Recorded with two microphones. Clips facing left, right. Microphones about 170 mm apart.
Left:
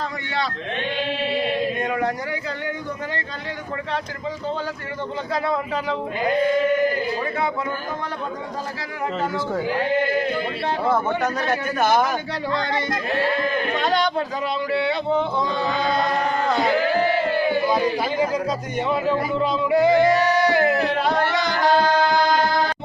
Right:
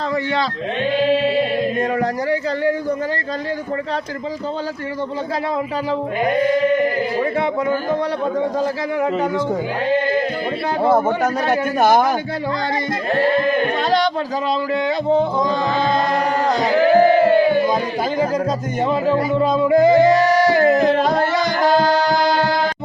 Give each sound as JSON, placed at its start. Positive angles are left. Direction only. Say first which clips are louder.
{"t": 2.0, "sound": "speech", "louder": "right 5 dB", "side_deg": -35}
{"t": 11.4, "sound": "a man's voice", "louder": "right 7 dB", "side_deg": -40}
{"t": 14.7, "sound": "speech", "louder": "right 3 dB", "side_deg": -40}
{"t": 16.4, "sound": "music", "louder": "right 4 dB", "side_deg": -40}
{"t": 18.8, "sound": "music", "louder": "right 4 dB", "side_deg": -40}